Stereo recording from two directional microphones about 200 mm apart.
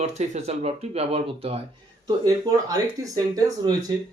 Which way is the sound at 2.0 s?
20° right (ahead or behind).